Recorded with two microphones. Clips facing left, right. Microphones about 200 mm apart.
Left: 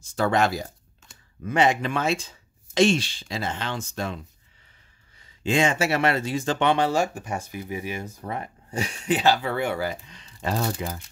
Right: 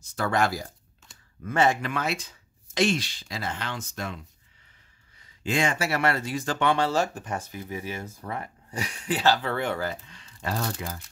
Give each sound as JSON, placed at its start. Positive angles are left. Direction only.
{"t": 0.0, "sound": "speech", "side_deg": 25}
{"t": 1.9, "sound": "speech", "side_deg": 25}
{"t": 5.4, "sound": "speech", "side_deg": 25}